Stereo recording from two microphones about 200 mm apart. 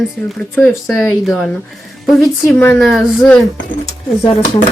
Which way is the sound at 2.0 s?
10° left (ahead or behind).